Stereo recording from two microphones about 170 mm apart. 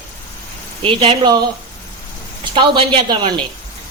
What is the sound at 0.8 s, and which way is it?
Speech, 35° right (ahead or behind).